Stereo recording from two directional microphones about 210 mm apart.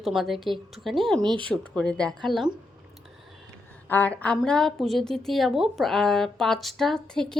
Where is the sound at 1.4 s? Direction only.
5° left (ahead or behind).